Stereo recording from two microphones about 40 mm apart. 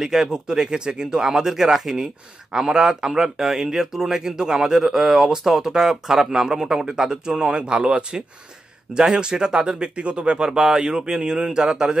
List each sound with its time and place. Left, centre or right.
0.0 s speech: centre
9.9 s speech: right